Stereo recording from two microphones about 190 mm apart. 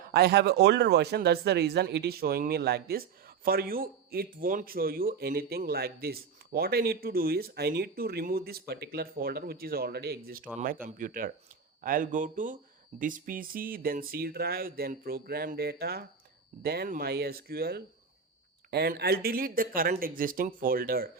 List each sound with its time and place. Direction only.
0.1 s speech: 55° right (ahead or behind)